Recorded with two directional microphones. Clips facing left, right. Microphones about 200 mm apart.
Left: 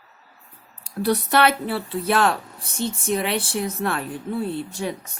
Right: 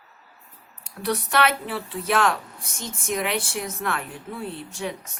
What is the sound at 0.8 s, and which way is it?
Speech, 35° left (ahead or behind).